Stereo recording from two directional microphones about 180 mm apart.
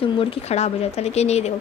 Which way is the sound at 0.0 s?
30° left (ahead or behind).